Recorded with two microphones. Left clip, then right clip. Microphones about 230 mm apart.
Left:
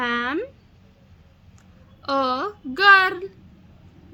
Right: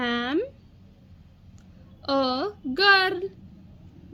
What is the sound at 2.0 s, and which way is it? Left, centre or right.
A woman's voice, centre.